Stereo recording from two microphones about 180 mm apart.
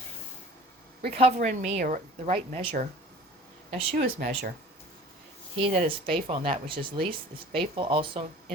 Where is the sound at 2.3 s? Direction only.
30° right (ahead or behind).